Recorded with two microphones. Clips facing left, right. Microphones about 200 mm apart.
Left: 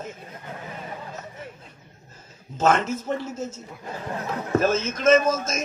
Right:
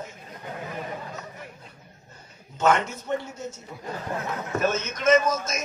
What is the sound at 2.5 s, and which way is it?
Speech, 40° left (ahead or behind).